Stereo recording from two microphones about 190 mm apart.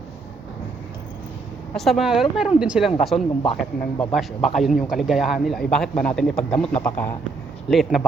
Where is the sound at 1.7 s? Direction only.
Centre (ahead or behind).